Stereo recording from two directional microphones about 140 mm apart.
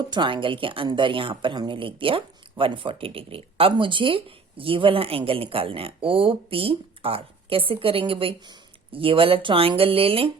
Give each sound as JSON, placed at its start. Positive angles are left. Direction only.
{"t": 0.0, "sound": "a woman's voice", "side_deg": -35}